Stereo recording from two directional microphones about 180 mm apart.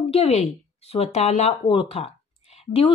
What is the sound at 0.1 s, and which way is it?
Speech, 35° left (ahead or behind).